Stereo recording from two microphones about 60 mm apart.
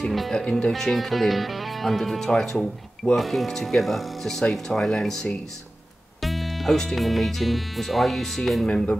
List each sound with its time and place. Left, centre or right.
0.0 s music: centre
0.3 s speech: centre
8.6 s speech: centre